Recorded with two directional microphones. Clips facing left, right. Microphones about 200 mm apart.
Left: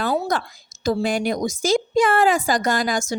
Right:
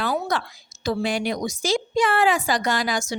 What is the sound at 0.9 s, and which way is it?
A woman's voice, 45° left (ahead or behind).